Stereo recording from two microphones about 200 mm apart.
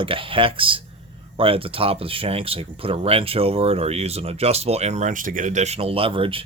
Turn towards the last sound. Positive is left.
turn(degrees=-25)  # may be behind; listen again after turning